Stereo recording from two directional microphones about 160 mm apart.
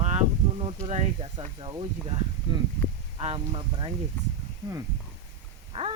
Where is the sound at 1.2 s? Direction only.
30° right (ahead or behind).